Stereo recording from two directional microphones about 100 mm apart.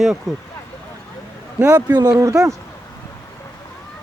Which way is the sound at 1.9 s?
40° right (ahead or behind).